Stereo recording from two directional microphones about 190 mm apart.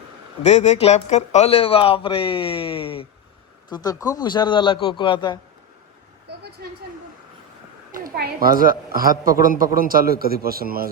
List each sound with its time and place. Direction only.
0.4 s a man's voice: 35° left (ahead or behind)
6.2 s vehicle: 60° right (ahead or behind)
7.9 s a woman's voice: 50° right (ahead or behind)